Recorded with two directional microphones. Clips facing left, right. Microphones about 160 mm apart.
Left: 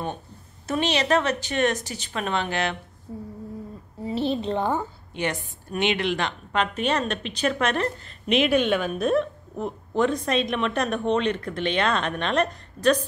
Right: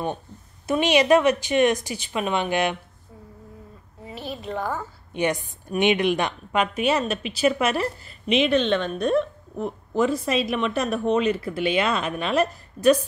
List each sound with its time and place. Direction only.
0.7 s speech: 10° right (ahead or behind)
3.1 s a sound: 30° left (ahead or behind)
4.0 s a woman's voice: 30° left (ahead or behind)
5.1 s a woman's voice: 15° right (ahead or behind)